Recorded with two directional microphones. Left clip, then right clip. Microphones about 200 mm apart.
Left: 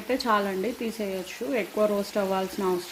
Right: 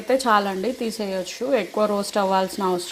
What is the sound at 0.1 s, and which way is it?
Speech, 15° right (ahead or behind).